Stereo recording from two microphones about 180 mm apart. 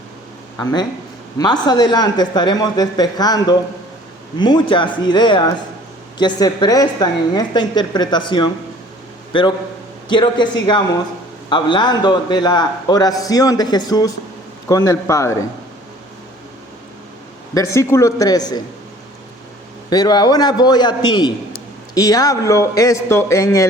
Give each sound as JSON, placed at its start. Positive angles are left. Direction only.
{"t": 1.4, "sound": "a man's voice", "side_deg": 20}
{"t": 17.5, "sound": "a man's voice", "side_deg": 15}
{"t": 19.9, "sound": "a man's voice", "side_deg": 20}